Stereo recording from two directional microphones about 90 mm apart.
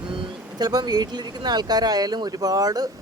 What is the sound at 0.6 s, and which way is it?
Speech, 50° right (ahead or behind).